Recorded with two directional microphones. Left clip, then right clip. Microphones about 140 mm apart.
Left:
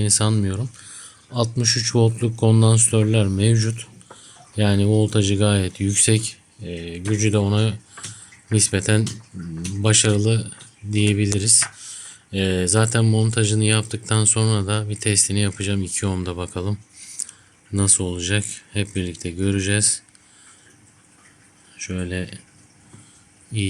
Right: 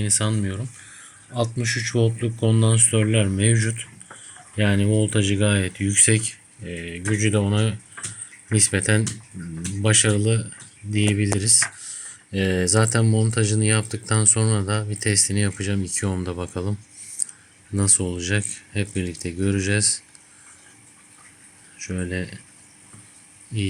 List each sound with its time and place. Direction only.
0.0 s speech: 50° left (ahead or behind)
2.9 s speech: 30° left (ahead or behind)
3.5 s speech: 15° left (ahead or behind)
4.5 s speech: 30° left (ahead or behind); by 16.7 s 10° left (ahead or behind)
17.7 s speech: 5° left (ahead or behind)
21.8 s speech: 5° left (ahead or behind)